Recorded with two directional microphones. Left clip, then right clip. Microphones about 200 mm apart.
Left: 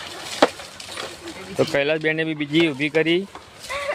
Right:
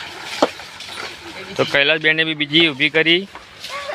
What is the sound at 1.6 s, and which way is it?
Speech, 10° left (ahead or behind).